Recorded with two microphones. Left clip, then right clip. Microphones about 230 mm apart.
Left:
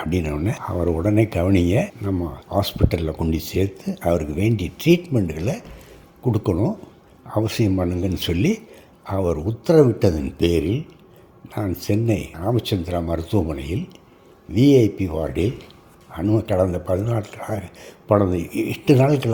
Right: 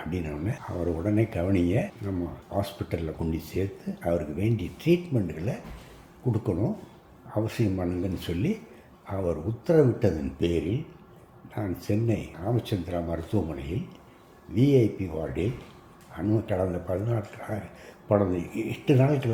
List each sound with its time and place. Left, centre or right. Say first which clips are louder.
0.0 s speech: left 9 dB; left